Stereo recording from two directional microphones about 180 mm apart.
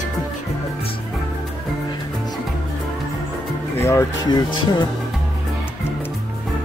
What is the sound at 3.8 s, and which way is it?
Speech, 15° left (ahead or behind).